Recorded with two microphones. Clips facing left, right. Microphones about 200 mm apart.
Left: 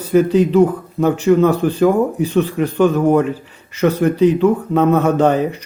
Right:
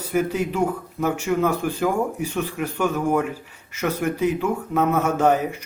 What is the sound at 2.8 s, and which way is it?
Speech, 35° left (ahead or behind).